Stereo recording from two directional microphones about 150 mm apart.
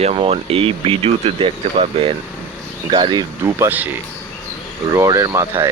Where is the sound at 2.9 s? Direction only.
30° right (ahead or behind).